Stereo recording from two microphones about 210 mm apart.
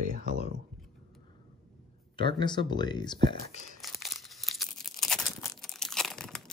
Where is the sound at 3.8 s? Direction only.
Centre (ahead or behind).